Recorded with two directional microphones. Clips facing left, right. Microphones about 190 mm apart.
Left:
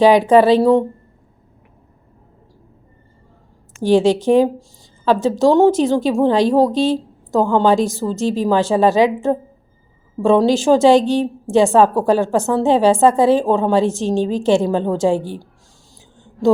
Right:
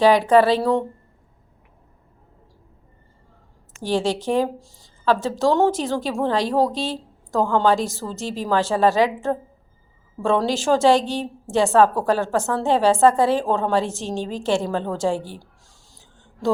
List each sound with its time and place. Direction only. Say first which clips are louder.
0.0 s speech: left 4 dB; 20° left (ahead or behind)
3.8 s a woman's voice: left 9 dB; 20° left (ahead or behind)